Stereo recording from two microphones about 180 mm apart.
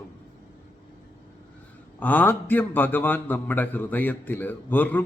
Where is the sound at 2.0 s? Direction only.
10° left (ahead or behind).